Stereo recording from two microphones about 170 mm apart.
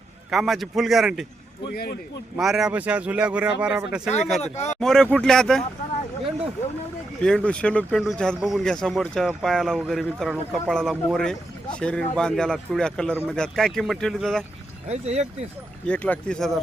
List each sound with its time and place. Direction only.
0.3 s a man's voice: centre (ahead or behind)
1.6 s a man's voice: 65° left (ahead or behind)
2.3 s a man's voice: centre (ahead or behind)
4.5 s speech: 40° left (ahead or behind)
4.8 s a man's voice: 5° left (ahead or behind)
7.2 s a man's voice: 5° left (ahead or behind)
14.8 s speech: 40° right (ahead or behind)
15.9 s a man's voice: 5° left (ahead or behind)